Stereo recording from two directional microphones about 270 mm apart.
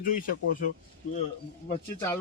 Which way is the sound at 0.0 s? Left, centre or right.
Left.